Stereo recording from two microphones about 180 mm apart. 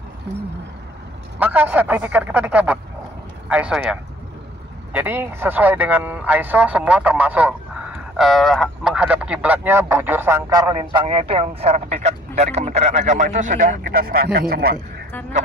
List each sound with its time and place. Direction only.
1.4 s speech: 10° right (ahead or behind); by 14.8 s 60° right (ahead or behind)